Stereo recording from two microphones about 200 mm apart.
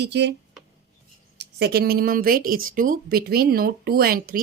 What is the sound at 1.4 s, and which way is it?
A woman's voice, 55° right (ahead or behind).